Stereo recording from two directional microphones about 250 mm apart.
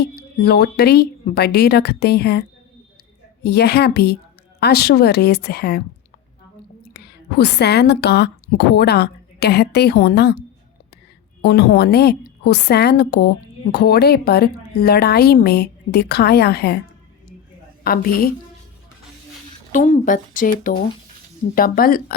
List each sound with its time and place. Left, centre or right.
0.0 s a woman's voice: left
6.9 s a woman's voice: left
11.4 s a woman's voice: left
17.8 s a woman's voice: left
19.7 s a woman's voice: left